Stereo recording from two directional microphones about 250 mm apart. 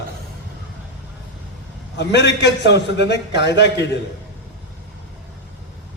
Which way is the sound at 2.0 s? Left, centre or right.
Left.